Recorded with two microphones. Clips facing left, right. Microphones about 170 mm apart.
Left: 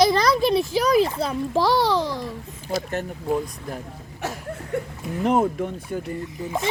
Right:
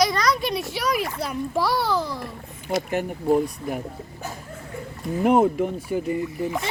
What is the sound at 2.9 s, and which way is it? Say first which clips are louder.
Speech: right 6 dB; 10° right (ahead or behind).